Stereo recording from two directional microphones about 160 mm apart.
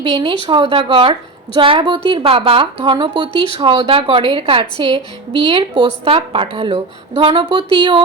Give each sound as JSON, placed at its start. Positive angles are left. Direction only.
{"t": 0.0, "sound": "a woman's voice", "side_deg": -30}